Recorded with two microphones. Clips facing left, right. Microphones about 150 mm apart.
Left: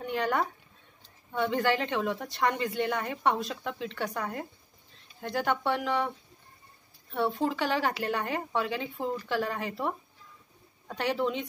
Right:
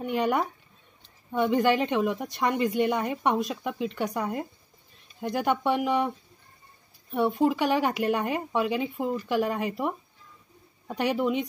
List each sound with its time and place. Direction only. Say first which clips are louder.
0.0 s a woman's voice: right 3 dB; 15° right (ahead or behind)